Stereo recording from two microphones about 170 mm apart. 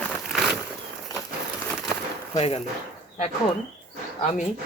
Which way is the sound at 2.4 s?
35° left (ahead or behind).